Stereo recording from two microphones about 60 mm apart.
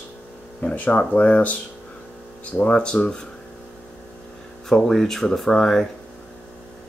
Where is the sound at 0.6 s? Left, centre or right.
Left.